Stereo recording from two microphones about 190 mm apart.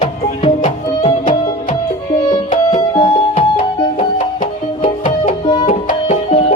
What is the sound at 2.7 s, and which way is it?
Music, 25° left (ahead or behind).